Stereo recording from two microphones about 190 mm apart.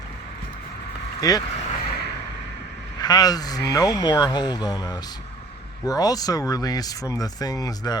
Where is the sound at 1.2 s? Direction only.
20° left (ahead or behind).